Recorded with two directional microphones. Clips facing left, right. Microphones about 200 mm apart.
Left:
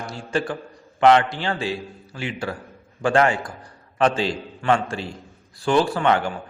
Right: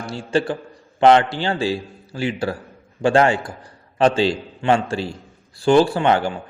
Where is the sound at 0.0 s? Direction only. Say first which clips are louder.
Right 4 dB; 30° right (ahead or behind).